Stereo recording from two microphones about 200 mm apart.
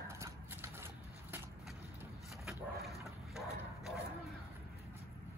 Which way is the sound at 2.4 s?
Centre (ahead or behind).